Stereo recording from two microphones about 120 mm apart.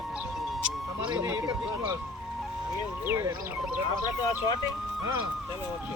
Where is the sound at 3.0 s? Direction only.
20° right (ahead or behind).